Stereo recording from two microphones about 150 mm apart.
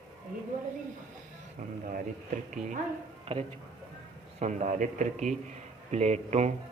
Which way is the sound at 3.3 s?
40° right (ahead or behind).